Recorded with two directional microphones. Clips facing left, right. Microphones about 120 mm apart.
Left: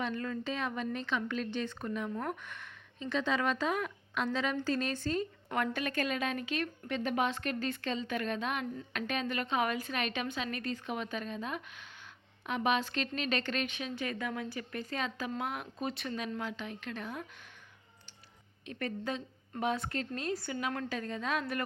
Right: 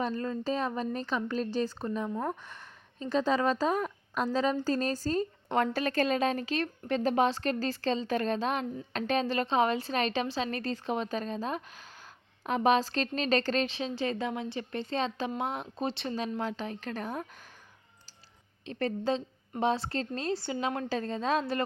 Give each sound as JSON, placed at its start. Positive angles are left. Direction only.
{"t": 0.0, "sound": "a woman's voice", "side_deg": -30}
{"t": 2.5, "sound": "a woman's voice", "side_deg": -35}
{"t": 18.6, "sound": "a woman's voice", "side_deg": -30}